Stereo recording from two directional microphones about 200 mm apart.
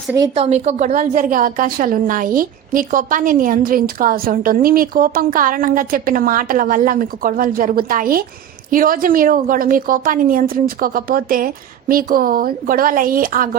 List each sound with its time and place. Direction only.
0.3 s a woman's voice: 30° right (ahead or behind)